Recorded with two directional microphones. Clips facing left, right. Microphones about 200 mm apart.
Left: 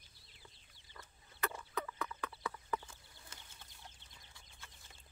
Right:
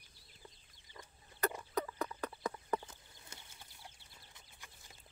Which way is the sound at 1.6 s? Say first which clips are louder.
Right 4 dB; 35° right (ahead or behind).